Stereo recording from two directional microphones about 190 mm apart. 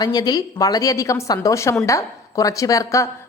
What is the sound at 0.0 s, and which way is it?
A woman's voice, 20° left (ahead or behind).